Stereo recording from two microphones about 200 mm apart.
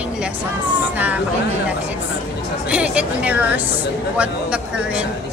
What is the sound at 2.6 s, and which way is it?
A woman's voice, 5° right (ahead or behind).